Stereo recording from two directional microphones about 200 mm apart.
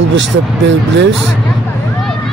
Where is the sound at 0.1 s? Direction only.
65° right (ahead or behind).